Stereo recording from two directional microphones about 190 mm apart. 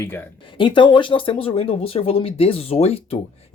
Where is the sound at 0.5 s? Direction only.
25° left (ahead or behind).